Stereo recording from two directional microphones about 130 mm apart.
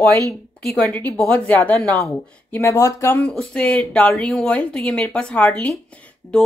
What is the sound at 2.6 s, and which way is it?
A woman's voice, 20° left (ahead or behind).